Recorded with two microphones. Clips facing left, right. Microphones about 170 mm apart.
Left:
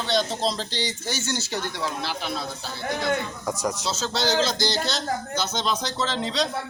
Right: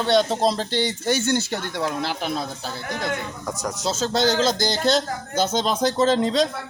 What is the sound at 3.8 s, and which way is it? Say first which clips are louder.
Speech: right 8 dB; 50° right (ahead or behind).